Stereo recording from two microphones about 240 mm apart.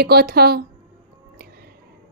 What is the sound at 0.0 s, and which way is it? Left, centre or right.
Speech, right.